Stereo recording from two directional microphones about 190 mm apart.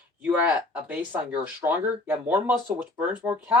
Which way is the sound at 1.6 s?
25° right (ahead or behind).